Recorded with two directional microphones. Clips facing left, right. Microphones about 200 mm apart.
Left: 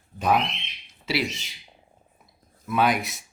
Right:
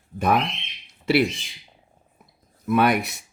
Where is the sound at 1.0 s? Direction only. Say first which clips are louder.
Right 7 dB; 55° right (ahead or behind).